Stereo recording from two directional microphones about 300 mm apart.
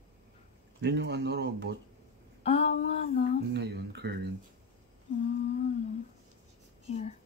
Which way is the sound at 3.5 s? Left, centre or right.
Right.